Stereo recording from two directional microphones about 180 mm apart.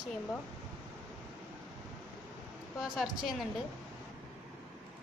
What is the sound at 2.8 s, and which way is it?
Speech, centre (ahead or behind).